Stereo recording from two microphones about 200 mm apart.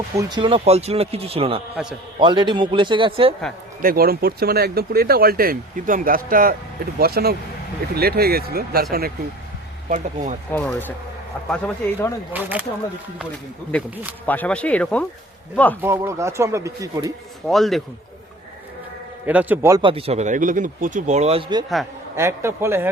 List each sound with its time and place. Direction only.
0.2 s speech: 20° right (ahead or behind)
1.7 s a man's voice: 5° right (ahead or behind)
2.1 s speech: 25° right (ahead or behind)
3.8 s speech: 45° right (ahead or behind)
9.9 s speech: 35° right (ahead or behind)
10.5 s speech: 10° left (ahead or behind)
12.3 s speech: 10° right (ahead or behind)
14.3 s speech: 5° left (ahead or behind)
15.8 s speech: 15° right (ahead or behind)
17.4 s a man's voice: centre (ahead or behind)
19.2 s speech: 10° right (ahead or behind); by 21.6 s 30° right (ahead or behind)
22.1 s speech: 15° right (ahead or behind)